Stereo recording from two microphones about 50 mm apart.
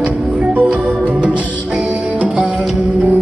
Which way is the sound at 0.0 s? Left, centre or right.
Right.